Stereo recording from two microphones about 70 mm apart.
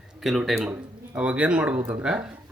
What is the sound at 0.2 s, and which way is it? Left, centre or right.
Speech, centre.